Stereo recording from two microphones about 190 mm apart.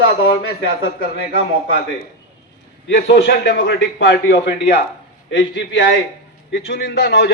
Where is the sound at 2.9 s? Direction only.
65° left (ahead or behind).